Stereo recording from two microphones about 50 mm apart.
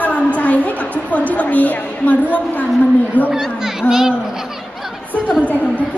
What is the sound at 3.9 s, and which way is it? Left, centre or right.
Laughter, centre.